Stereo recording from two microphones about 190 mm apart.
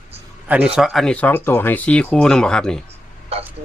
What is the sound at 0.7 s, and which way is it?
Speech, centre (ahead or behind).